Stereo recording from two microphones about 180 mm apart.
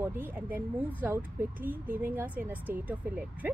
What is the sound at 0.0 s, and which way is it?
A woman's voice, 10° right (ahead or behind).